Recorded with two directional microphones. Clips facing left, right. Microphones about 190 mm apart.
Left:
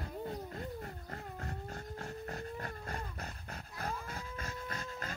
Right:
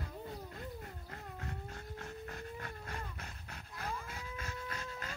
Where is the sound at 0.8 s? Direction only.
45° left (ahead or behind).